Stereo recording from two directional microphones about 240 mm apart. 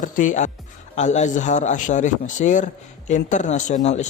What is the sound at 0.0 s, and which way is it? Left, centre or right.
A man's voice, left.